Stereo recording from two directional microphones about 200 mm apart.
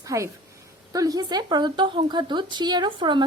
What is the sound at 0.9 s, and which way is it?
A woman's voice, 20° right (ahead or behind).